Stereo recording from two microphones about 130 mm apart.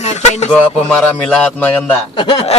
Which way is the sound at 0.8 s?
10° left (ahead or behind).